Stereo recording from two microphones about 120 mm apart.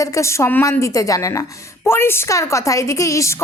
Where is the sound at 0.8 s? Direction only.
30° left (ahead or behind).